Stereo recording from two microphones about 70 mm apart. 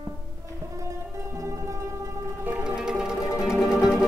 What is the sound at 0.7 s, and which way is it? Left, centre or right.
Music, right.